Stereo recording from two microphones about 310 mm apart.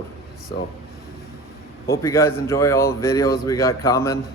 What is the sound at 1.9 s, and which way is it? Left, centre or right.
Speech, centre.